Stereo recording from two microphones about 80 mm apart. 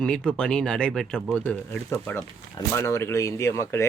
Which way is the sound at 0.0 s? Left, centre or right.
Centre.